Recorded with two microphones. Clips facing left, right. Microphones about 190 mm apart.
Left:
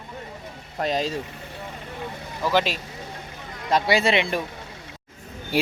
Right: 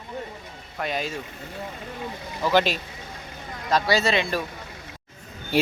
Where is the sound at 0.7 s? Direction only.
35° left (ahead or behind).